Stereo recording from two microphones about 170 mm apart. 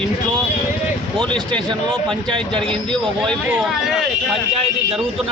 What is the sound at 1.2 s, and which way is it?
Speech, 5° left (ahead or behind).